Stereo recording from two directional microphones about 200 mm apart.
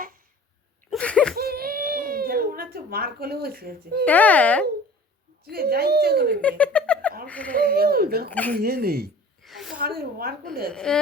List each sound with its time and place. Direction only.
0.9 s a sound: 5° left (ahead or behind)
1.4 s a sound: 50° right (ahead or behind)
4.0 s a child's voice: 5° left (ahead or behind)
5.5 s a woman's voice: 50° right (ahead or behind)
6.6 s a sound: 5° left (ahead or behind)
7.3 s speech: 5° left (ahead or behind)
7.5 s a woman's voice: 50° right (ahead or behind)
8.3 s a child's voice: 10° left (ahead or behind)
8.5 s a woman's voice: 50° right (ahead or behind)
9.4 s a sound: centre (ahead or behind)
10.0 s a woman's voice: 50° right (ahead or behind)
10.7 s a woman's voice: 5° left (ahead or behind)